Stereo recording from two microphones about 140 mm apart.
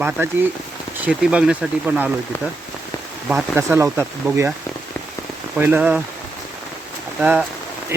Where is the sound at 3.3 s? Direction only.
10° right (ahead or behind).